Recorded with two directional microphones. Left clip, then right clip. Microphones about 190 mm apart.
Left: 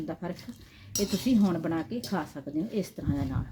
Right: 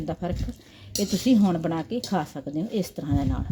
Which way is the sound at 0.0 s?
45° right (ahead or behind).